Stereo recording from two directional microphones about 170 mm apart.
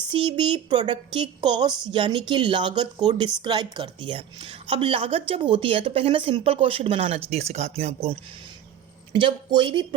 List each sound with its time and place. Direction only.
0.1 s a woman's voice: 30° right (ahead or behind)
9.2 s speech: 30° right (ahead or behind)